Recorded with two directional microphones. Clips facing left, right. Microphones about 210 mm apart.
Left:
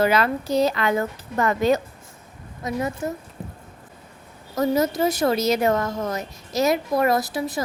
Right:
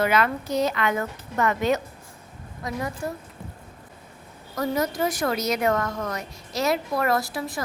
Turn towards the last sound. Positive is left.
turn(degrees=20)  # may be behind; listen again after turning